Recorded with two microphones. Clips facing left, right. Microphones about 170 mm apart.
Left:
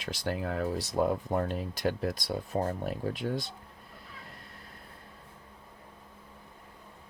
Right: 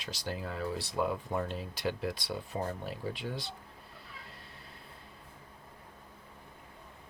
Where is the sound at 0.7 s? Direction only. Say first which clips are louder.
Left 4 dB; 40° left (ahead or behind).